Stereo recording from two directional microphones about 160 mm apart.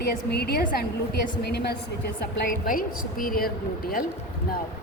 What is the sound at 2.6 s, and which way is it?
A woman's voice, 60° left (ahead or behind).